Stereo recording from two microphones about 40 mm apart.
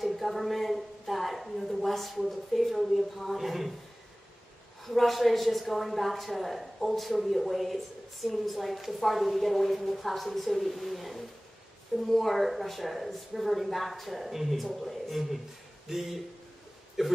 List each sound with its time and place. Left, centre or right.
0.0 s a woman's voice: centre
4.8 s speech: centre